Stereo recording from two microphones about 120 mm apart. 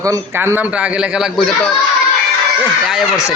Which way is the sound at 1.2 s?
Centre (ahead or behind).